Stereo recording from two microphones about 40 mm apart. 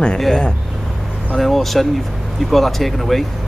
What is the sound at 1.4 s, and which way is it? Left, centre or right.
Speech, centre.